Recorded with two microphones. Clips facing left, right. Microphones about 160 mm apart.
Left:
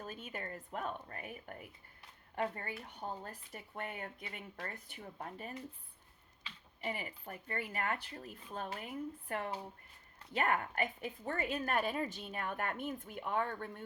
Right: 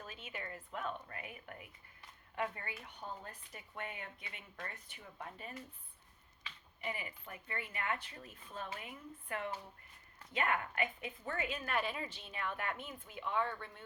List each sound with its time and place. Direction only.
0.0 s a woman's voice: 45° left (ahead or behind)
6.8 s a woman's voice: 40° left (ahead or behind)